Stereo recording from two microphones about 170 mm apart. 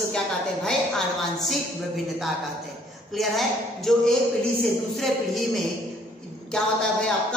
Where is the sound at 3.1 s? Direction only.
Centre (ahead or behind).